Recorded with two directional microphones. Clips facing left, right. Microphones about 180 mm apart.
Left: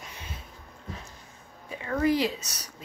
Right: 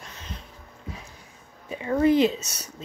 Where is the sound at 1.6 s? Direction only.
20° right (ahead or behind).